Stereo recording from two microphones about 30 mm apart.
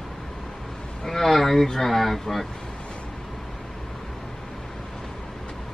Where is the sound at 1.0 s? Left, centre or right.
Centre.